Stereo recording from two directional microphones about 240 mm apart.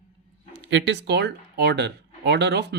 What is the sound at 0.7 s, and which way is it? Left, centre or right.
A man's voice, right.